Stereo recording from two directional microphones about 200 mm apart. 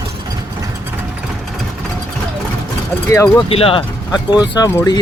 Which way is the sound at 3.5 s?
30° left (ahead or behind).